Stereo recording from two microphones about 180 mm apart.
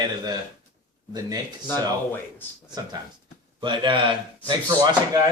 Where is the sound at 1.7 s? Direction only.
10° left (ahead or behind).